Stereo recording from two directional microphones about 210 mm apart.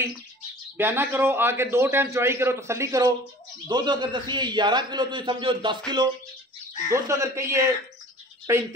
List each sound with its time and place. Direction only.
0.7 s a man's voice: 10° right (ahead or behind)
6.9 s a man's voice: 15° right (ahead or behind)